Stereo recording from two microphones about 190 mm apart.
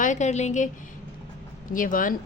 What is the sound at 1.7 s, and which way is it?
Speech, 45° left (ahead or behind).